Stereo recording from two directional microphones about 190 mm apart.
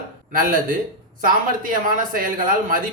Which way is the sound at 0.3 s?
45° right (ahead or behind).